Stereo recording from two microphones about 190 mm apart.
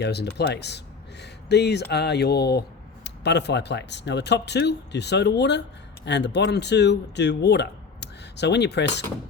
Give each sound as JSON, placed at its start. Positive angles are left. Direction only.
{"t": 0.0, "sound": "speech", "side_deg": 60}